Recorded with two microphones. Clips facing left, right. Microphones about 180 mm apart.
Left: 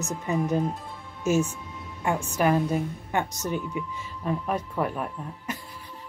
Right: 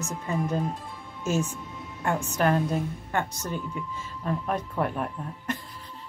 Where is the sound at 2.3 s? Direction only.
10° left (ahead or behind).